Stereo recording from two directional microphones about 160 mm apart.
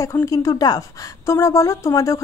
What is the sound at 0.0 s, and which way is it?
A woman's voice, 20° left (ahead or behind).